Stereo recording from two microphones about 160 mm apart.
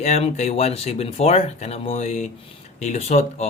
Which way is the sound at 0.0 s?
45° left (ahead or behind).